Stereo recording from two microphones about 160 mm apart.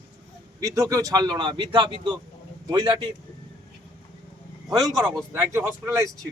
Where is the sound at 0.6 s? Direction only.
20° right (ahead or behind).